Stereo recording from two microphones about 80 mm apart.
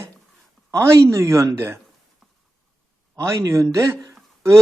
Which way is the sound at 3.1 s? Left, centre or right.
Right.